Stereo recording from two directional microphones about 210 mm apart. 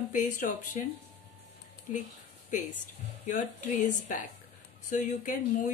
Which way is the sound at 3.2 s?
35° left (ahead or behind).